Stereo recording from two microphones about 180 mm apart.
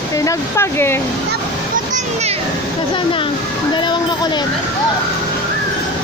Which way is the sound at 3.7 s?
25° left (ahead or behind).